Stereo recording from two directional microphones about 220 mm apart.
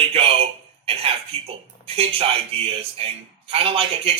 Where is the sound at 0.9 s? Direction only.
25° right (ahead or behind).